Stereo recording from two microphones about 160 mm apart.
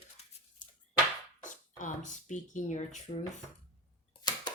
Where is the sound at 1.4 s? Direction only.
50° left (ahead or behind).